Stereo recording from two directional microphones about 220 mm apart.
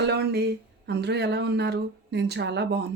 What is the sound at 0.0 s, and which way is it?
Speech, 45° right (ahead or behind).